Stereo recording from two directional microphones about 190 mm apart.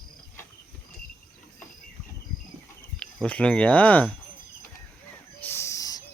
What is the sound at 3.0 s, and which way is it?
Speech, 5° left (ahead or behind).